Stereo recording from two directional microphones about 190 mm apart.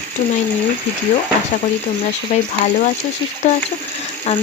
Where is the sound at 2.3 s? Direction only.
40° left (ahead or behind).